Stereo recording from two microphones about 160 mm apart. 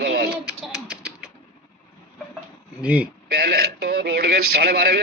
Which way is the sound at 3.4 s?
75° right (ahead or behind).